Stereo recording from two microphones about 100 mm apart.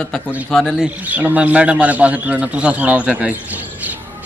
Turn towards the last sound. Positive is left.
turn(degrees=-15)  # may be behind; listen again after turning